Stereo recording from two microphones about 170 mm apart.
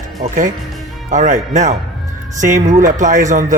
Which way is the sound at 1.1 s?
45° right (ahead or behind).